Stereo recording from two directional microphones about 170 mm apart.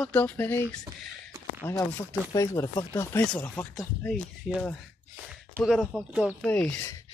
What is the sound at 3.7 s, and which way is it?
Speech, centre (ahead or behind).